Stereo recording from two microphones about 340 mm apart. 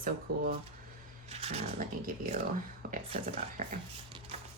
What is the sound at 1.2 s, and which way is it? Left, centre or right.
Speech, centre.